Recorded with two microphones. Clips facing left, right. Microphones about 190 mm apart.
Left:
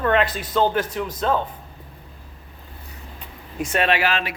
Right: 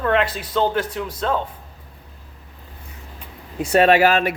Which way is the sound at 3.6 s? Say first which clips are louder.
Right 7 dB; 35° right (ahead or behind).